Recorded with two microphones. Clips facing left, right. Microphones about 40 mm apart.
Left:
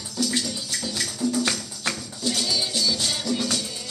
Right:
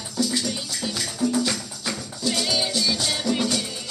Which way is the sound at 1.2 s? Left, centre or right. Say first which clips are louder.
Right 2 dB; centre.